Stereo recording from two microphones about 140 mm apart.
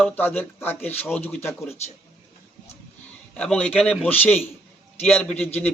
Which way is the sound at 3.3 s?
10° left (ahead or behind).